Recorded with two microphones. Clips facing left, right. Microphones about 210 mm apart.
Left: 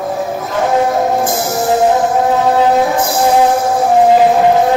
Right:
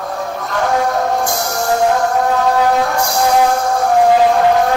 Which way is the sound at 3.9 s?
20° left (ahead or behind).